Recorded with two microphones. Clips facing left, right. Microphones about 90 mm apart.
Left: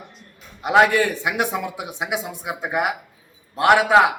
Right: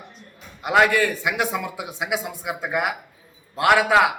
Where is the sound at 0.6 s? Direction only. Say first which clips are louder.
Left 2 dB; 20° left (ahead or behind).